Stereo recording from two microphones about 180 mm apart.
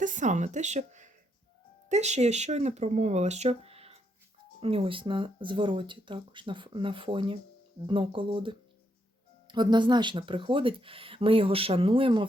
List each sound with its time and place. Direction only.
0.0 s speech: 45° right (ahead or behind); by 12.2 s 30° right (ahead or behind)